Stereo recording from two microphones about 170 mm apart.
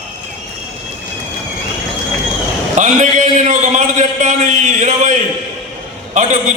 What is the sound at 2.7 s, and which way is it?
A man's voice, 45° right (ahead or behind).